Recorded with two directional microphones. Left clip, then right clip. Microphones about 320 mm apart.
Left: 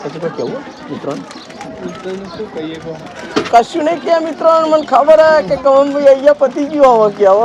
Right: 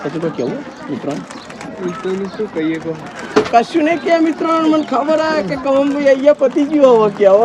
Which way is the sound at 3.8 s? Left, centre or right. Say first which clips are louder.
Even; centre.